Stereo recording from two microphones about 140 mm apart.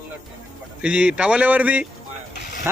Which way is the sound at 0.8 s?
10° right (ahead or behind).